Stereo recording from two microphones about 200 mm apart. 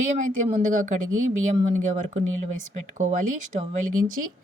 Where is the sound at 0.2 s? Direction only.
35° right (ahead or behind).